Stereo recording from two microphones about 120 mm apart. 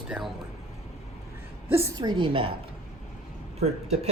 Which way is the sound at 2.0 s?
40° right (ahead or behind).